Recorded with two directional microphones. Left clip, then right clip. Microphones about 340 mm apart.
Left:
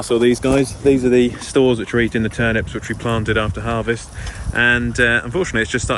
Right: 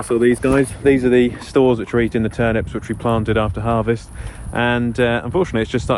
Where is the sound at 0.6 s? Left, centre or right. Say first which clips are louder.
Even; centre.